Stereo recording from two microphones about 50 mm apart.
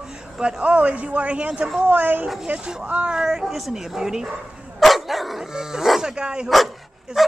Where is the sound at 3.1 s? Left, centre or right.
Centre.